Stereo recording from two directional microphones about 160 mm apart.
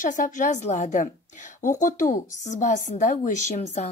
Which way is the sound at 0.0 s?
55° left (ahead or behind).